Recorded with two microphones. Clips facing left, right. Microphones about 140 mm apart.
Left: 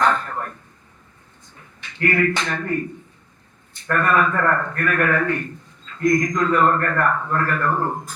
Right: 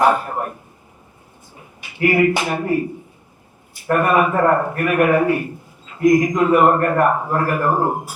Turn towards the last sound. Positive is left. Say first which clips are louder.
# right 4 dB
turn(degrees=-15)  # may be behind; listen again after turning